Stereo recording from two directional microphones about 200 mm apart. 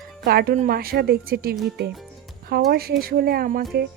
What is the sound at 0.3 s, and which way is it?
A woman's voice, 50° right (ahead or behind).